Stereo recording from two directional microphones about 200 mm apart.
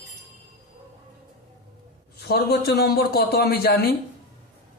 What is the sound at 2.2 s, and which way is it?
A man's voice, 50° left (ahead or behind).